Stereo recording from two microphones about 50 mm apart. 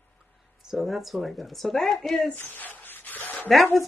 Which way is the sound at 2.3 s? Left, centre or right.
Left.